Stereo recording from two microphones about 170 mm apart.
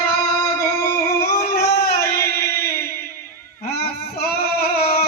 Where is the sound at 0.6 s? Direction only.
60° left (ahead or behind).